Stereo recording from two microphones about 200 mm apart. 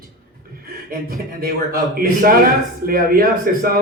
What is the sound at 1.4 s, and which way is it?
A man's voice, 45° right (ahead or behind).